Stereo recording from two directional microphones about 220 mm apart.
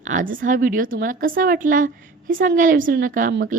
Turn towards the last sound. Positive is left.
turn(degrees=-40)  # may be behind; listen again after turning